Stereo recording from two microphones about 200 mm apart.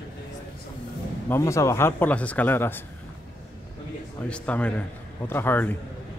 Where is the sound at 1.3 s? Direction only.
15° left (ahead or behind).